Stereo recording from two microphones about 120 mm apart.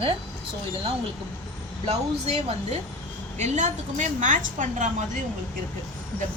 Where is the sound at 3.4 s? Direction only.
80° right.